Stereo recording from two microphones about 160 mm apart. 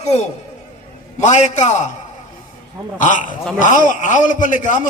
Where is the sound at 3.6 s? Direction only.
50° left (ahead or behind).